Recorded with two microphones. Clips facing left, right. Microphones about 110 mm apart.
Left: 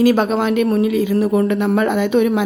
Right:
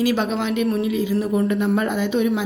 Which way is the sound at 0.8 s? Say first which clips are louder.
Left 5 dB; 60° left (ahead or behind).